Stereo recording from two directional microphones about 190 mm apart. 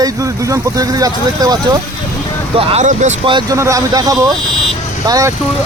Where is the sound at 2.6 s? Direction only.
30° right (ahead or behind).